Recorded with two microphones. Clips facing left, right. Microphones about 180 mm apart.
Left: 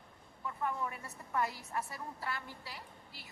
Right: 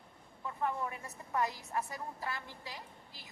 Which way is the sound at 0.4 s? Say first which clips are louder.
Right 1 dB; 25° right (ahead or behind).